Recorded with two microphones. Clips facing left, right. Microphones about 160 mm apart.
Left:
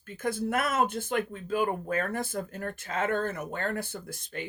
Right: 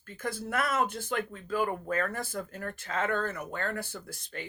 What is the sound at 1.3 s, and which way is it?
Speech, 20° left (ahead or behind).